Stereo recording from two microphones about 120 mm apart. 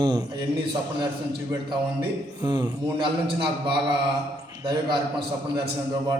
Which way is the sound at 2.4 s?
35° right (ahead or behind).